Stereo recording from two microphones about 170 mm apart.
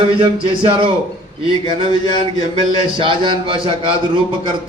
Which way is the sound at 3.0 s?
30° right (ahead or behind).